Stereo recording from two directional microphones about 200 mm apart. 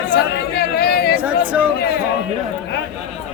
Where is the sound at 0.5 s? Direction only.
55° left (ahead or behind).